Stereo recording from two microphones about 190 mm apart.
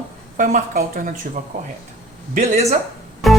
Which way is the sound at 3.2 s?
Centre (ahead or behind).